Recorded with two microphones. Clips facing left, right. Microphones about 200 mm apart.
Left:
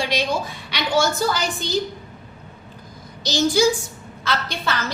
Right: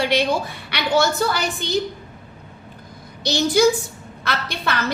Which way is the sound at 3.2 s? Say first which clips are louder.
Right 1 dB; 60° right (ahead or behind).